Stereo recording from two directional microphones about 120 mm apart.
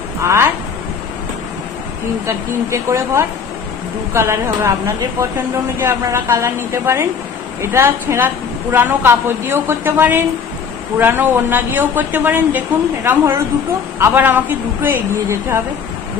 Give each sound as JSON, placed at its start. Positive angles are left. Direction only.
{"t": 0.2, "sound": "a woman's voice", "side_deg": -25}
{"t": 2.2, "sound": "a woman's voice", "side_deg": -25}